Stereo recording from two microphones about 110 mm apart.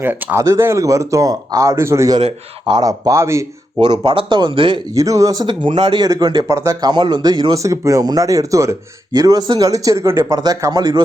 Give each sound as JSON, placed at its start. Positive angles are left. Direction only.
{"t": 0.0, "sound": "speech", "side_deg": -20}
{"t": 3.8, "sound": "speech", "side_deg": -45}
{"t": 4.9, "sound": "speech", "side_deg": -30}
{"t": 5.5, "sound": "speech", "side_deg": -50}
{"t": 6.9, "sound": "speech", "side_deg": -40}
{"t": 10.2, "sound": "speech", "side_deg": -35}